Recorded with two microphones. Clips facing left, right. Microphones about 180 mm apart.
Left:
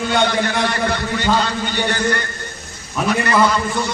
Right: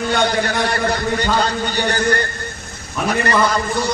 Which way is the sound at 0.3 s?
40° right (ahead or behind).